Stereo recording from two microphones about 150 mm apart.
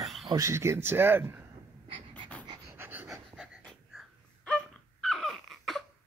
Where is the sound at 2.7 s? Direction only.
15° right (ahead or behind).